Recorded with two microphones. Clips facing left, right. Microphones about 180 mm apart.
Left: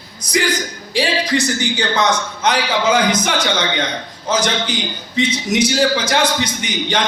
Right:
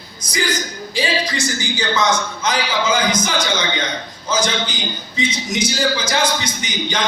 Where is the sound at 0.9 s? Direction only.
65° left (ahead or behind).